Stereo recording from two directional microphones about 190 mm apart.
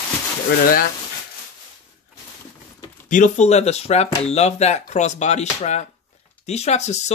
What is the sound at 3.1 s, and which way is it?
Speech, 40° left (ahead or behind).